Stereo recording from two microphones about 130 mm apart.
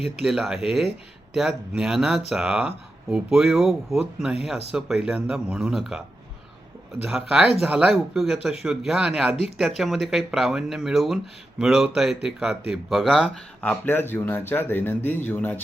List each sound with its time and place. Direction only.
0.2 s speech: 5° right (ahead or behind)
7.0 s speech: 5° right (ahead or behind)
13.6 s speech: 15° left (ahead or behind)